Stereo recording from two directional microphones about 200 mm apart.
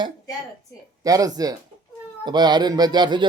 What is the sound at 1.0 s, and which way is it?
Speech, 15° right (ahead or behind).